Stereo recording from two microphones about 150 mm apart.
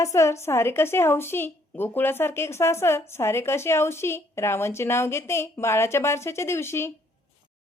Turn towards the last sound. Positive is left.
turn(degrees=15)  # may be behind; listen again after turning